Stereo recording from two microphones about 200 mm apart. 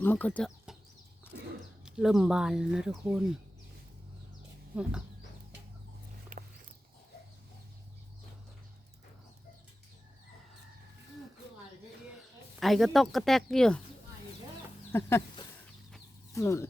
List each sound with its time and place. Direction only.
0.0 s speech: 10° left (ahead or behind)
1.3 s a sound: 60° right (ahead or behind)
1.8 s speech: centre (ahead or behind)
4.7 s speech: 5° right (ahead or behind)
6.3 s dog: 40° right (ahead or behind)
12.5 s speech: centre (ahead or behind)
14.9 s a sound: 10° left (ahead or behind)
16.3 s speech: 15° left (ahead or behind)